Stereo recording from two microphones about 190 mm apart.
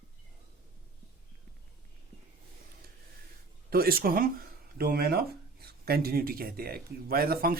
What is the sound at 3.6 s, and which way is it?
Speech, 50° right (ahead or behind).